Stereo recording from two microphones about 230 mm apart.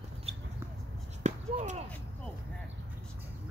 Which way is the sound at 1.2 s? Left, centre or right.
Right.